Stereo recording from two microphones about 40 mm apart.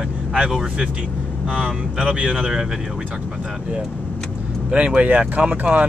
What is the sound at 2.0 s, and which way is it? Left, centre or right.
Speech, right.